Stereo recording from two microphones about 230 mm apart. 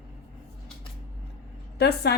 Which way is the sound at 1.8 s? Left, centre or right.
Left.